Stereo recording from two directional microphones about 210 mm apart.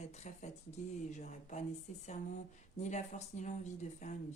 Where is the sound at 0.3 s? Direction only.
35° left (ahead or behind).